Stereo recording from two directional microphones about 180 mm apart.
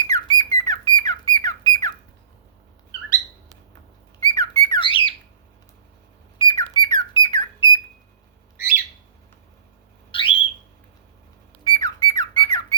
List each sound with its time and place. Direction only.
0.0 s squawk: 25° left (ahead or behind)
4.3 s squawk: 30° left (ahead or behind)
6.4 s bird: 25° left (ahead or behind)
10.1 s alarm: 30° left (ahead or behind)
11.6 s squawk: 25° left (ahead or behind)